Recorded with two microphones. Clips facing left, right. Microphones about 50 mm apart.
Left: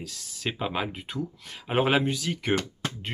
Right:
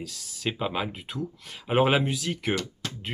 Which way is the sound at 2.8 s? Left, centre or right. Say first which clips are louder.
Left 3 dB; left.